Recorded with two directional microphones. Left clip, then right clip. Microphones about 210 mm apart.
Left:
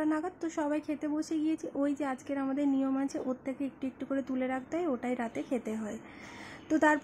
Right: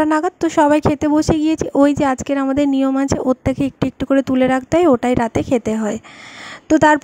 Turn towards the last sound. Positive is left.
turn(degrees=-40)  # may be behind; listen again after turning